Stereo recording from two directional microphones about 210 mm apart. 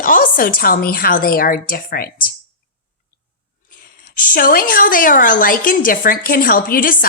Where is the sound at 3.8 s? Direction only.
40° left (ahead or behind).